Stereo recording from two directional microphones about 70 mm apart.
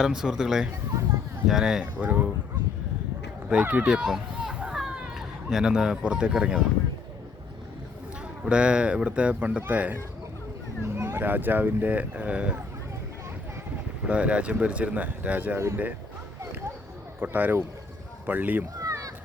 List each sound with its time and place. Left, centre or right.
0.0 s speech: centre
2.0 s speech: right
3.5 s speech: right
3.8 s children playing: centre
8.4 s speech: centre
10.8 s speech: right; by 12.5 s centre
14.0 s speech: centre
15.5 s speech: right
17.2 s speech: right
18.8 s a sound: right